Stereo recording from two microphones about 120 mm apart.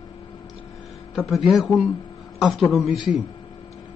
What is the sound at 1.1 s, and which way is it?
A man's voice, centre (ahead or behind).